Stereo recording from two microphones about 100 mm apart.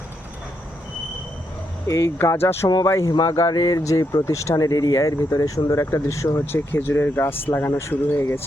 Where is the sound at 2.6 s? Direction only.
35° left (ahead or behind).